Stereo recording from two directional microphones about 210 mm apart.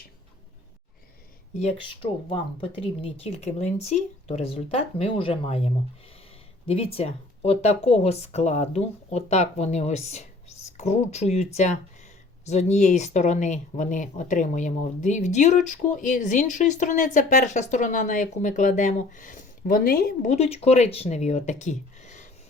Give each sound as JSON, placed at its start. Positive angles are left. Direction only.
{"t": 1.5, "sound": "speech", "side_deg": 30}
{"t": 20.3, "sound": "speech", "side_deg": 30}